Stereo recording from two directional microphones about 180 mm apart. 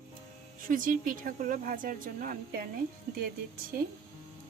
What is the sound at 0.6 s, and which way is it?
Speech, 50° right (ahead or behind).